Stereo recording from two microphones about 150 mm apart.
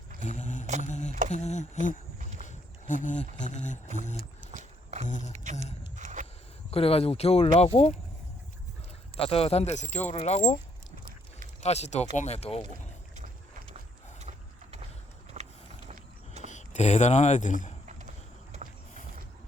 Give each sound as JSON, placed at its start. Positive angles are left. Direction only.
{"t": 0.2, "sound": "mantra", "side_deg": 50}
{"t": 0.8, "sound": "a sound", "side_deg": 50}
{"t": 1.3, "sound": "speech", "side_deg": 50}
{"t": 4.5, "sound": "dog", "side_deg": -50}
{"t": 5.0, "sound": "speech", "side_deg": 55}
{"t": 5.4, "sound": "speech", "side_deg": -55}
{"t": 6.0, "sound": "a sound", "side_deg": -55}
{"t": 6.7, "sound": "speech", "side_deg": 40}
{"t": 9.1, "sound": "speech", "side_deg": 40}
{"t": 11.6, "sound": "speech", "side_deg": 45}
{"t": 14.2, "sound": "mechanisms", "side_deg": -50}
{"t": 15.3, "sound": "vehicle", "side_deg": -45}
{"t": 15.9, "sound": "a sound", "side_deg": -45}
{"t": 16.5, "sound": "speech", "side_deg": 50}